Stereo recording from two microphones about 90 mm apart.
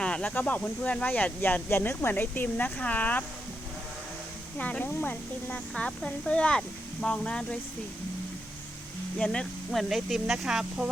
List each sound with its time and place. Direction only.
0.0 s speech: 10° left (ahead or behind)
4.5 s speech: 15° left (ahead or behind)
9.1 s speech: 10° left (ahead or behind)
9.9 s speech: centre (ahead or behind)